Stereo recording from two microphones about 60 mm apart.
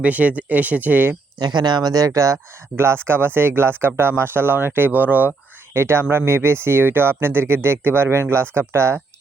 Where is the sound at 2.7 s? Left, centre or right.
Right.